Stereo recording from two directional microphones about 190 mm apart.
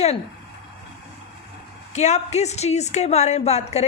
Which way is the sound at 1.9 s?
35° left (ahead or behind).